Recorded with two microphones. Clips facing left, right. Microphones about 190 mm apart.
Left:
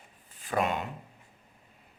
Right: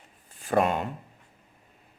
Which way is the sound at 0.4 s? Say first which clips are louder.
Right 5 dB; 45° right (ahead or behind).